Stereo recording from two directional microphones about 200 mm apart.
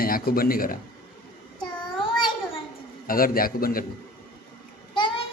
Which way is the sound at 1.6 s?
25° left (ahead or behind).